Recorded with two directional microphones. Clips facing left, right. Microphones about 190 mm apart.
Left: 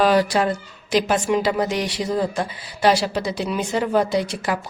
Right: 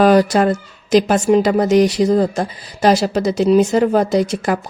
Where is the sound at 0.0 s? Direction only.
45° right (ahead or behind).